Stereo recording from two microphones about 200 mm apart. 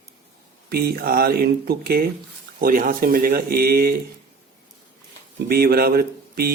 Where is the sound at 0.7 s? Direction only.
50° right (ahead or behind).